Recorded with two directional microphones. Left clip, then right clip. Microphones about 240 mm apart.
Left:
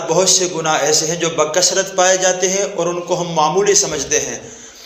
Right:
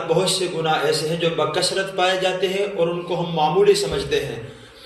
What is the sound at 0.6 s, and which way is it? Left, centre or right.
A man's voice, left.